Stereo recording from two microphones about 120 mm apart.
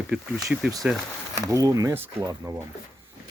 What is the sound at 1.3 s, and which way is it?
Speech, 25° right (ahead or behind).